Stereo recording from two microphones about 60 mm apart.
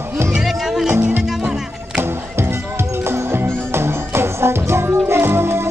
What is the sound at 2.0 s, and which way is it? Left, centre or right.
Music, right.